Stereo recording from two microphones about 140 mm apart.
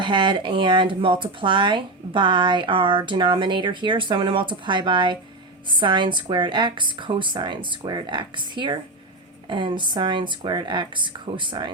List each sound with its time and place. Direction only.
0.0 s speech: 35° right (ahead or behind)